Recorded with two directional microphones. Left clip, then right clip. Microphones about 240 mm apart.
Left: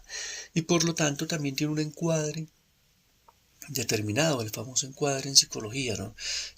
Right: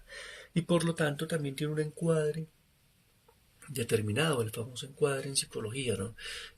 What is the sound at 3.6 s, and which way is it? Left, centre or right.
Speech, left.